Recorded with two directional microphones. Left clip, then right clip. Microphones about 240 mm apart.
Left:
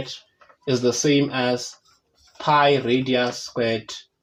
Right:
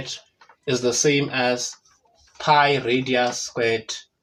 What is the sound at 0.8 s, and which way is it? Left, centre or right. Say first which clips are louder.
Speech: even; left.